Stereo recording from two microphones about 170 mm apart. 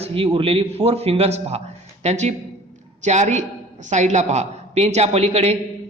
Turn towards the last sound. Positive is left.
turn(degrees=-40)  # may be behind; listen again after turning